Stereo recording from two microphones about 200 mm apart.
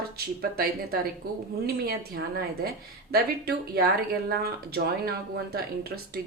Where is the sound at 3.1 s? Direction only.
50° right (ahead or behind).